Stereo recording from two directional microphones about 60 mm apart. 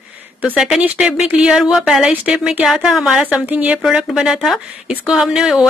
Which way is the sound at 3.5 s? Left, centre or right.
Right.